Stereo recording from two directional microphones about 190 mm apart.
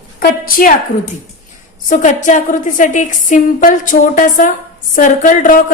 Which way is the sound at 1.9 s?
40° left (ahead or behind).